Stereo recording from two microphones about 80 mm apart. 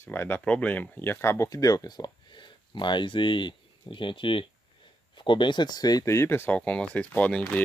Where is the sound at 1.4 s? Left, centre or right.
Left.